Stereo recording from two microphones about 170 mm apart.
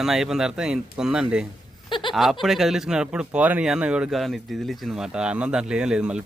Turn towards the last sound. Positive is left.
turn(degrees=-5)  # may be behind; listen again after turning